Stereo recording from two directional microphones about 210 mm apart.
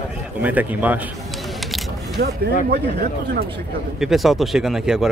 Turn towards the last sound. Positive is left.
turn(degrees=0)  # may be behind; listen again after turning